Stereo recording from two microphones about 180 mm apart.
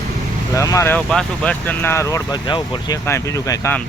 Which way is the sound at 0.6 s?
20° left (ahead or behind).